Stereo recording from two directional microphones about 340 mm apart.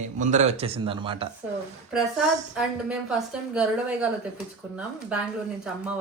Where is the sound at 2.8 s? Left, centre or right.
Centre.